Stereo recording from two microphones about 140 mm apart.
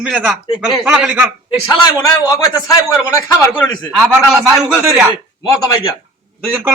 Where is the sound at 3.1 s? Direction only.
20° left (ahead or behind).